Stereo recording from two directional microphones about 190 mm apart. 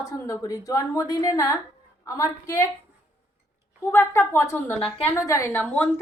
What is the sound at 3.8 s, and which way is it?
A woman's voice, 10° left (ahead or behind).